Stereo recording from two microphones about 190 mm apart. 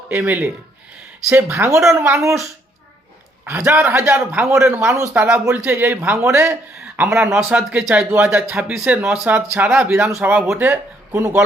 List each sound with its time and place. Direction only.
0.1 s a man's voice: 10° right (ahead or behind)
3.4 s a man's voice: 15° right (ahead or behind)